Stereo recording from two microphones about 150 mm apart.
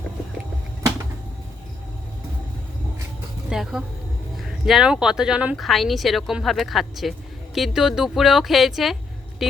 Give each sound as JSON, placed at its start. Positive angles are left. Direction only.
{"t": 3.5, "sound": "speech", "side_deg": -5}